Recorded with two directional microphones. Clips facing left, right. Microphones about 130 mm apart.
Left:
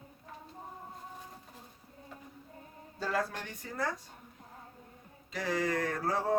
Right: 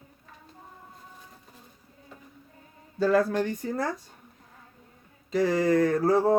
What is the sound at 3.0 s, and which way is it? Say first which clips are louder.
Speech: right 11 dB; 55° right (ahead or behind).